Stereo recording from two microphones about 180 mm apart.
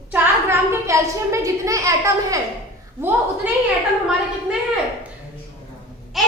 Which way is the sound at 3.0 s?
10° right (ahead or behind).